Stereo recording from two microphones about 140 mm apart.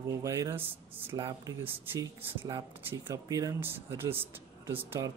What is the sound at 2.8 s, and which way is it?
Speech, 20° right (ahead or behind).